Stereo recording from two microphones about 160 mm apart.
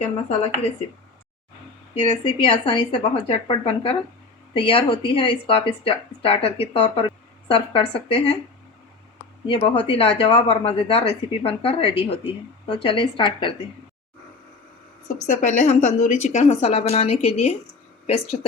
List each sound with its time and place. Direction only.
2.0 s speech: 35° left (ahead or behind)
9.5 s speech: 35° left (ahead or behind)
15.0 s a woman's voice: 50° left (ahead or behind)